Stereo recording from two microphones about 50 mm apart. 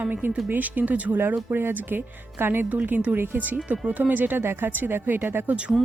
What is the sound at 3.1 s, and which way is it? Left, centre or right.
Speech, right.